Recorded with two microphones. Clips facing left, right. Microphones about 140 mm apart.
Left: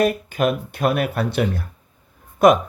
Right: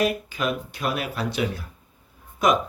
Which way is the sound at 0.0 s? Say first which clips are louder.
Left 5 dB; 50° left (ahead or behind).